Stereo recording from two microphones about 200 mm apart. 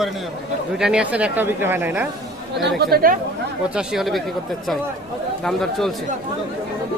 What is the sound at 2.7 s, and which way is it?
Speech, 50° right (ahead or behind).